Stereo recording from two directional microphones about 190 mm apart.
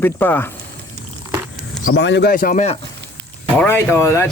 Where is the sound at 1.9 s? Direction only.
70° left (ahead or behind); by 2.6 s 45° left (ahead or behind).